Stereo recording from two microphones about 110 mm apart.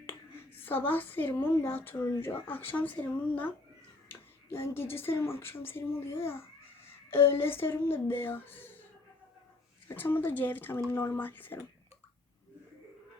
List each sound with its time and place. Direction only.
0.0 s a woman's voice: 20° left (ahead or behind)
9.9 s speech: 15° left (ahead or behind)